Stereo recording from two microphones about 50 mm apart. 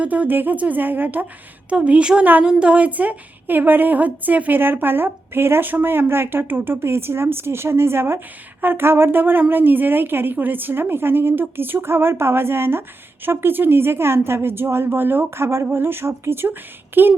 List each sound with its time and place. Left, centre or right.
0.0 s a woman's voice: right
1.7 s a woman's voice: right
15.4 s a woman's voice: right